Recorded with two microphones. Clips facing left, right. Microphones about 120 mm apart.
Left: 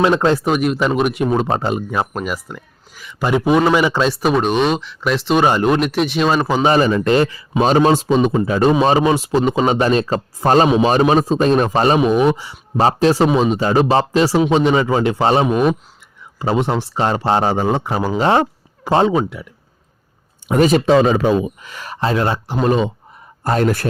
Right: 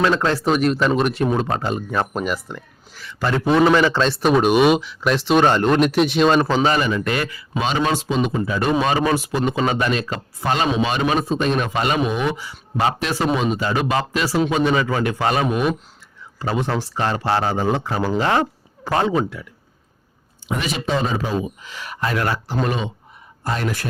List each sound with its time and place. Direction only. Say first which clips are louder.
0.0 s speech: left 4 dB; 20° left (ahead or behind)
0.5 s a man's voice: left 1 dB; 5° left (ahead or behind)
1.5 s speech: left 4 dB; 30° left (ahead or behind)
1.7 s a man's voice: left 2 dB; 10° left (ahead or behind)
6.7 s a man's voice: left 6 dB; 35° left (ahead or behind)
9.0 s a man's voice: left 5 dB; 20° left (ahead or behind)
20.5 s speech: left 12 dB; 45° left (ahead or behind)
20.9 s speech: left 9 dB; 80° left; by 21.8 s 55° left (ahead or behind)
21.8 s a man's voice: left 4 dB; 30° left (ahead or behind)
23.4 s speech: left 7 dB; 45° left (ahead or behind)